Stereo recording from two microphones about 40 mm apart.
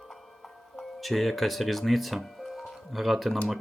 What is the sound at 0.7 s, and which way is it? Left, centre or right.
Speech, centre.